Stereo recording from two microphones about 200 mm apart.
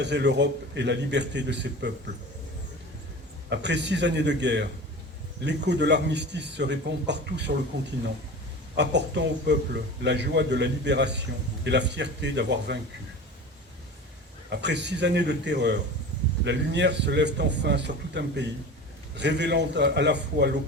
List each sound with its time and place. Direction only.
0.0 s a man's voice: 60° right (ahead or behind)
3.5 s a man's voice: 60° right (ahead or behind)
8.7 s a man's voice: 60° right (ahead or behind)
14.5 s a man's voice: 60° right (ahead or behind)